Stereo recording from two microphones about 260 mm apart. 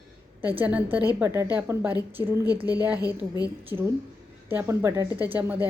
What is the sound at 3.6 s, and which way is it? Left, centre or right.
Speech, centre.